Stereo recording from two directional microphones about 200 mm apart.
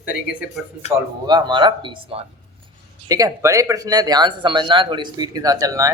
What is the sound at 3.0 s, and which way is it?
Speech, 15° right (ahead or behind).